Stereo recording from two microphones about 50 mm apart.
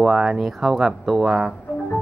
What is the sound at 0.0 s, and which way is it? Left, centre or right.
Speech, centre.